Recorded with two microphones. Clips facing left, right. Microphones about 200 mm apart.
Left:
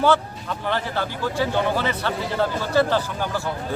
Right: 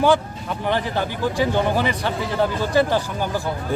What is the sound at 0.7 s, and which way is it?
A man's voice, 15° right (ahead or behind).